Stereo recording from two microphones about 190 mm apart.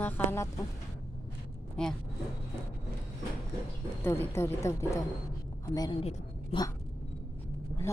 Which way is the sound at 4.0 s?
10° left (ahead or behind).